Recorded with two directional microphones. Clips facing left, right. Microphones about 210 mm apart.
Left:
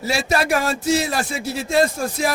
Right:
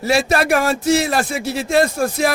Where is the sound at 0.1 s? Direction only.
55° right (ahead or behind); by 1.2 s 75° right (ahead or behind).